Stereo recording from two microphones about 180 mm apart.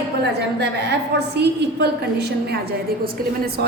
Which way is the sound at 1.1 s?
70° right (ahead or behind).